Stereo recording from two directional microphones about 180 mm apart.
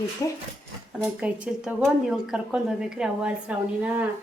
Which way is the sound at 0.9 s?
5° right (ahead or behind).